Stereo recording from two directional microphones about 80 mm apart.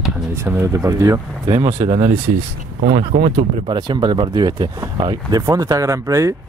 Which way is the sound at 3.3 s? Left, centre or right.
Right.